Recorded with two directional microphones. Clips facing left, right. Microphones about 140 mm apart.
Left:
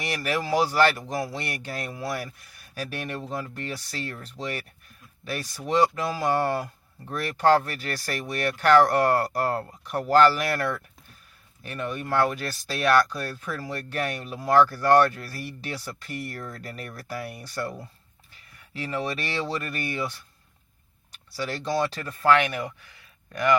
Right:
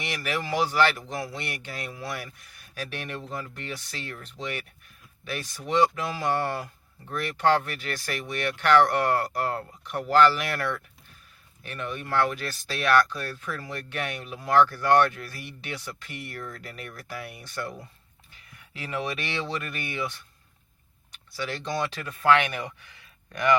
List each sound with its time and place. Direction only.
0.0 s speech: 40° left (ahead or behind)
19.0 s speech: 40° left (ahead or behind)
21.1 s computer keyboard: 40° left (ahead or behind)
21.8 s speech: 35° left (ahead or behind)
22.2 s speech: 5° left (ahead or behind)